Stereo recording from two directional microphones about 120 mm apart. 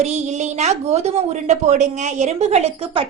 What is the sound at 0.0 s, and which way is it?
A woman's voice, 70° right (ahead or behind).